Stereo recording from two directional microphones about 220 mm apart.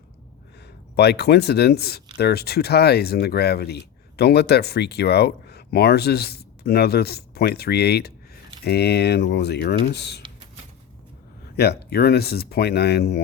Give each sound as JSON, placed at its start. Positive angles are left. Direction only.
{"t": 0.9, "sound": "speech", "side_deg": 50}
{"t": 11.5, "sound": "speech", "side_deg": 50}